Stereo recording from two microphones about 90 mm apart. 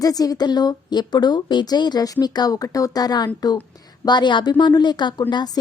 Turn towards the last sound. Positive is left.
turn(degrees=55)  # may be behind; listen again after turning